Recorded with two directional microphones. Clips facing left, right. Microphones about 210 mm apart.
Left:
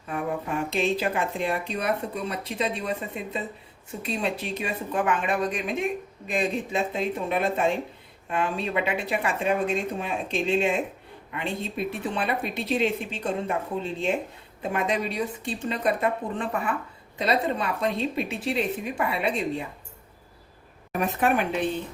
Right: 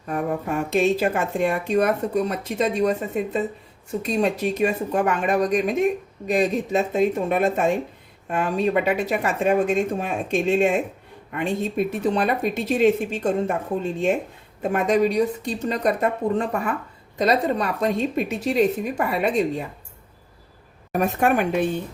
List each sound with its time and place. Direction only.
0.1 s a woman's voice: 45° right (ahead or behind)
20.9 s a woman's voice: 45° right (ahead or behind)